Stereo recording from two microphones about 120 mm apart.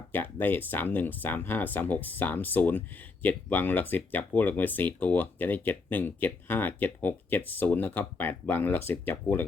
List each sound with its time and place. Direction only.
0.1 s speech: 15° left (ahead or behind)